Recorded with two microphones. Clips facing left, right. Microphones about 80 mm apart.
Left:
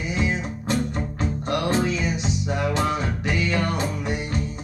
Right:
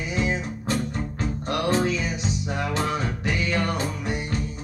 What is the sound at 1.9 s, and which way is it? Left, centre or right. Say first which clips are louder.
Music: left 1 dB; left.